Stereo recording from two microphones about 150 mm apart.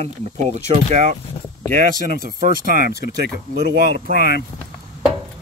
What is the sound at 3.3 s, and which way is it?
Speech, 90° right.